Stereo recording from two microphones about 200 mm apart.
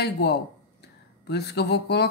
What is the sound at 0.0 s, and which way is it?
A woman's voice, 55° left (ahead or behind).